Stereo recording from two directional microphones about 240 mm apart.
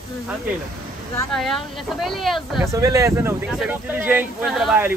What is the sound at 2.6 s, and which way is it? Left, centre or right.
Speech, centre.